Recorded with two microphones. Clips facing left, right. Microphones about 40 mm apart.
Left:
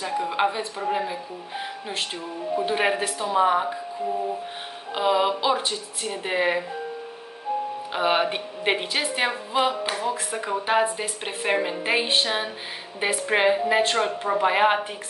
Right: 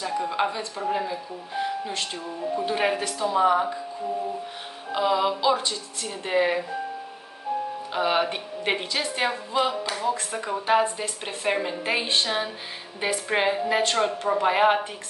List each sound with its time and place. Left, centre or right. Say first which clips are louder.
0.0 s speech: left 2 dB; centre
4.9 s speech: left 1 dB; left
7.9 s speech: left 1 dB; centre
10.1 s a woman's voice: left 2 dB; centre